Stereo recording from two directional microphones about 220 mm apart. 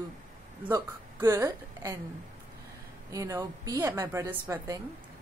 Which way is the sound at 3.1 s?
15° right (ahead or behind).